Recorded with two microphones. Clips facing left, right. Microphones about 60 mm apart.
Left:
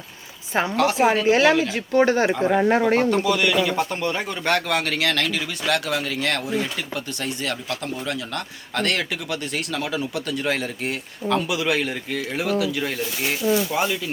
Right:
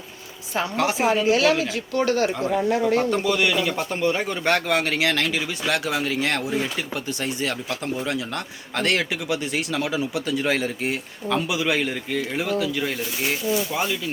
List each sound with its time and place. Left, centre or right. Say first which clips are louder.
0.8 s a man's voice: left 3 dB; centre
1.3 s speech: left 2 dB; left
2.5 s speech: left 3 dB; left
3.2 s a man's voice: left 1 dB; centre